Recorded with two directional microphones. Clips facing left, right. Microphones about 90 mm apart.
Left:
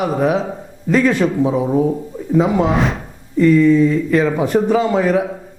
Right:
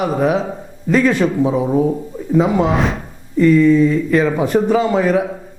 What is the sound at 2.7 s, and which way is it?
Speech, centre (ahead or behind).